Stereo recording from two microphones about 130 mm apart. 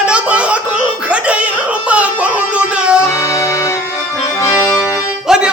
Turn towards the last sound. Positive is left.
turn(degrees=-5)  # may be behind; listen again after turning